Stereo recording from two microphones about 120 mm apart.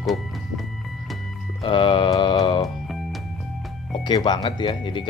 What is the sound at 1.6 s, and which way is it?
Music, 45° left (ahead or behind).